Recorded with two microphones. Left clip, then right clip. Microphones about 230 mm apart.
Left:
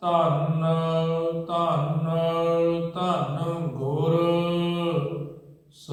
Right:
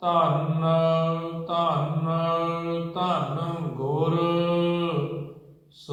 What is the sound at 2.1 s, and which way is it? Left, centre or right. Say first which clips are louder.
Mantra: left 2 dB; left.